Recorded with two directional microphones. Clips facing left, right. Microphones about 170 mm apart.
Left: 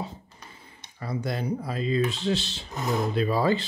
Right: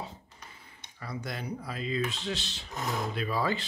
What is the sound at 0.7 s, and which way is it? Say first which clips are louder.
Speech: left 7 dB; 30° left (ahead or behind).